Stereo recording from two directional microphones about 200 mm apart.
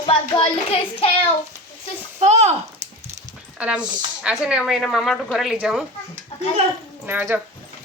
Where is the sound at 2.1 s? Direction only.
35° right (ahead or behind).